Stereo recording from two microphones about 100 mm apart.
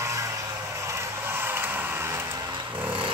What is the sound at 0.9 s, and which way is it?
Vehicle, 25° right (ahead or behind).